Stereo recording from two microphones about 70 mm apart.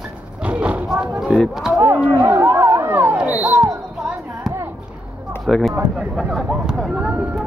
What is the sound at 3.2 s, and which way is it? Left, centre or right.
Speech, centre.